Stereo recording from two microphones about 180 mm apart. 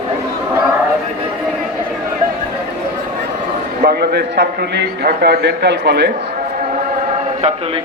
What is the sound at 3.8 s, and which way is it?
A man's voice, 60° right (ahead or behind).